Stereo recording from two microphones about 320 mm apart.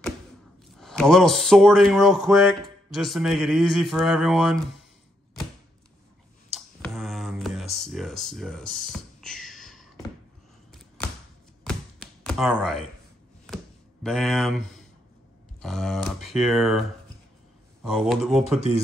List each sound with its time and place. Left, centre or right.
0.7 s speech: centre
6.5 s music: centre
7.7 s speech: centre
11.6 s tap: centre
14.0 s speech: centre
15.6 s speech: centre
17.8 s speech: centre